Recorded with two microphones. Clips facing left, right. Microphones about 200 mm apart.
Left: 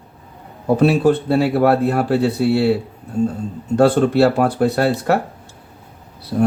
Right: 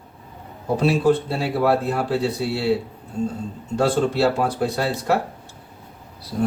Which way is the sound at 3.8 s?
60° left (ahead or behind).